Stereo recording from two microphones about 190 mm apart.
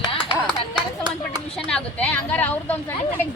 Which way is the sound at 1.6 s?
5° left (ahead or behind).